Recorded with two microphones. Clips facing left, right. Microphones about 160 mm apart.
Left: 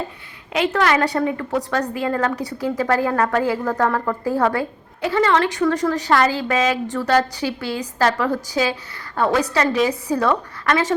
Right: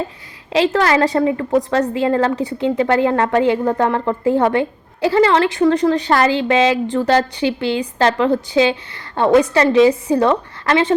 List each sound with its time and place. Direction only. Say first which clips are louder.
0.5 s a woman's voice: right 4 dB; 30° right (ahead or behind)